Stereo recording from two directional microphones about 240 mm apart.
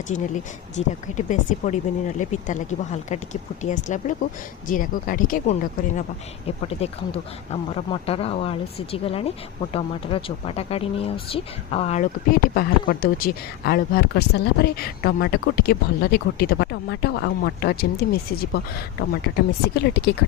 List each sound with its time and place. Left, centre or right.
0.1 s speech: left
6.7 s speech: left